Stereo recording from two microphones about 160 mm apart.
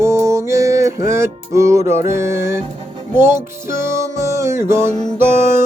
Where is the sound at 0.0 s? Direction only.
15° right (ahead or behind).